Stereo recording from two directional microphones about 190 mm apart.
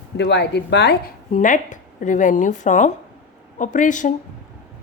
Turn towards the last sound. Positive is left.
turn(degrees=40)  # may be behind; listen again after turning